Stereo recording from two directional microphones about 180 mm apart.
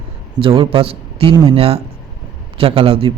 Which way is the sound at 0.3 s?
30° right (ahead or behind).